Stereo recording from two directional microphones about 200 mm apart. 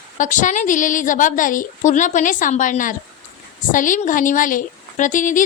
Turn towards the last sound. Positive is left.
turn(degrees=40)  # may be behind; listen again after turning